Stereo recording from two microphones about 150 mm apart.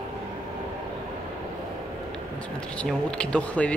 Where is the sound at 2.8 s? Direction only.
5° left (ahead or behind).